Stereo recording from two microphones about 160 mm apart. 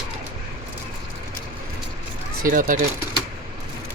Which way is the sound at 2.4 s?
55° right (ahead or behind).